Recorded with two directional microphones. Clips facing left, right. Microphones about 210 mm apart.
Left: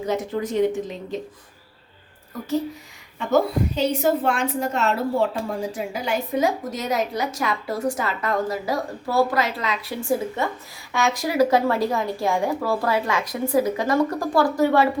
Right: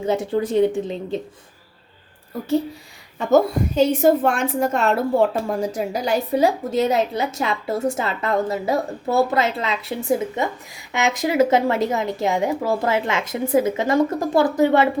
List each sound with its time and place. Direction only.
0.0 s a woman's voice: 30° right (ahead or behind)
3.2 s a woman's voice: 45° right (ahead or behind)
5.7 s a woman's voice: 40° right (ahead or behind); by 14.8 s 20° right (ahead or behind)